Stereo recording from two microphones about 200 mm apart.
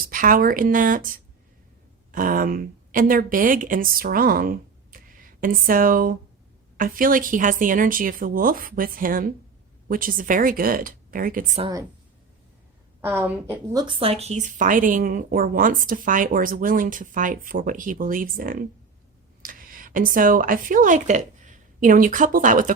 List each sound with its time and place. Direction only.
0.0 s a woman's voice: 45° right (ahead or behind)
11.6 s a woman's voice: 15° right (ahead or behind)
13.0 s a woman's voice: 10° right (ahead or behind)
13.7 s a woman's voice: 25° right (ahead or behind); by 22.7 s 40° right (ahead or behind)